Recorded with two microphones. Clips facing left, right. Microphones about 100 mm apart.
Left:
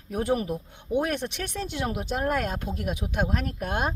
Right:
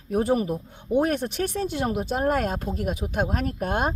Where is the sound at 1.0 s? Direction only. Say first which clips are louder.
Right 5 dB; 40° right (ahead or behind).